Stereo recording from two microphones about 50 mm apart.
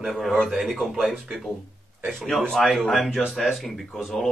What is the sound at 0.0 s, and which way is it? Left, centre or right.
Speech, centre.